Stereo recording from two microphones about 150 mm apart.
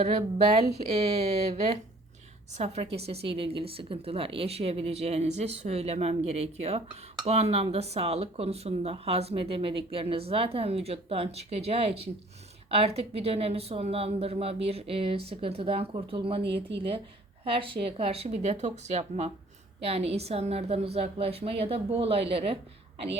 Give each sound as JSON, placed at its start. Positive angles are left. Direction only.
{"t": 0.0, "sound": "a woman's voice", "side_deg": -45}